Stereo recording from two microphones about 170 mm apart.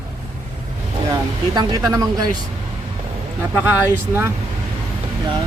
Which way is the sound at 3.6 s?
10° right (ahead or behind).